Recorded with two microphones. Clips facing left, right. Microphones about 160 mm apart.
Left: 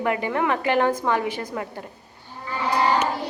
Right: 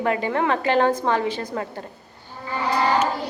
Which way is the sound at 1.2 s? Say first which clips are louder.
Right 2 dB; 15° left (ahead or behind).